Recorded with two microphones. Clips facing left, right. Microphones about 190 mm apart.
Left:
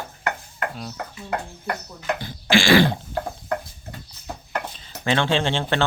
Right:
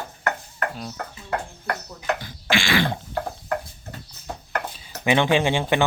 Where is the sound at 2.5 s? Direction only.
35° left (ahead or behind).